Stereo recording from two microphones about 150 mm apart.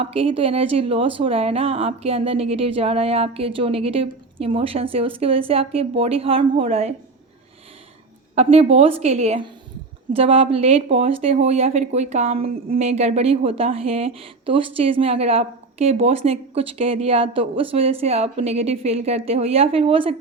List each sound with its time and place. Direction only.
0.0 s speech: 40° right (ahead or behind)
8.4 s a woman's voice: 45° right (ahead or behind)